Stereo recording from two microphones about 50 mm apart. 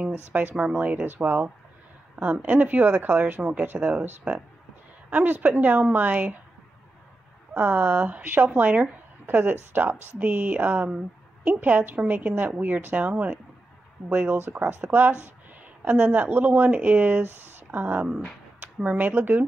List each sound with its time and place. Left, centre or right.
0.3 s speech: right
5.1 s speech: right
7.5 s speech: right
10.6 s speech: right